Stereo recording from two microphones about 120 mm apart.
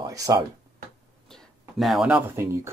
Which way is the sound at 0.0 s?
30° right (ahead or behind).